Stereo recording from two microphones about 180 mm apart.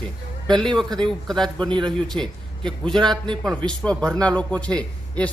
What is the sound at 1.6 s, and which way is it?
Speech, 25° right (ahead or behind).